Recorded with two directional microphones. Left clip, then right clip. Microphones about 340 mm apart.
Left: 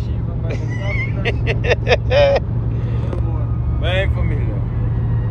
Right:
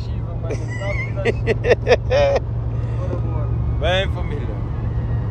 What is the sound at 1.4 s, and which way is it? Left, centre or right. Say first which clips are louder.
Vehicle: right 1 dB; right.